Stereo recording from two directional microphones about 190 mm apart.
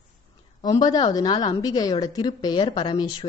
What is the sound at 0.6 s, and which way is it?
A woman's voice, 20° left (ahead or behind).